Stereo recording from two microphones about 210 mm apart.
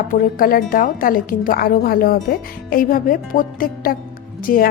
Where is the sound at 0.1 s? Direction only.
40° left (ahead or behind).